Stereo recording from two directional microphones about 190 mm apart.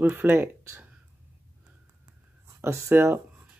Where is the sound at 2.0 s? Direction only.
15° right (ahead or behind).